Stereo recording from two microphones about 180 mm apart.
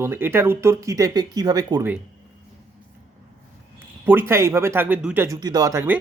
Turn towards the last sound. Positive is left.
turn(degrees=-15)  # may be behind; listen again after turning